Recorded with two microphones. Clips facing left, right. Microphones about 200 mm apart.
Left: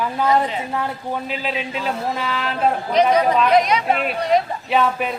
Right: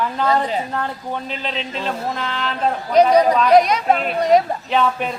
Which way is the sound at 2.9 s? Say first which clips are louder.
Right 4 dB; 40° right (ahead or behind).